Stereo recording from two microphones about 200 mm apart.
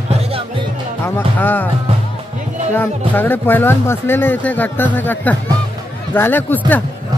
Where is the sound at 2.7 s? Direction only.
10° left (ahead or behind).